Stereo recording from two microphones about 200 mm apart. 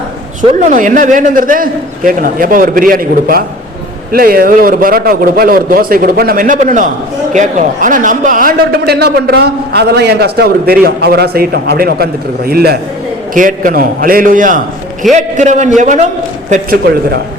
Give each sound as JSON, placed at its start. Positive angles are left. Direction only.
{"t": 0.6, "sound": "a man's voice", "side_deg": -40}